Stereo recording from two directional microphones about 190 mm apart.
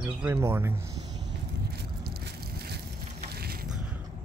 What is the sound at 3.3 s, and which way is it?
Crushing, 55° right (ahead or behind).